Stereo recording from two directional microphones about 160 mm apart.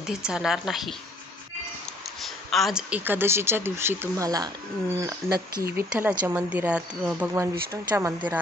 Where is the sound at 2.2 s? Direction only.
Centre (ahead or behind).